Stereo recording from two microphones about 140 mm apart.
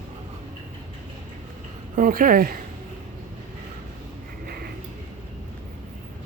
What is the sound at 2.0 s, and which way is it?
Speech, 90° right.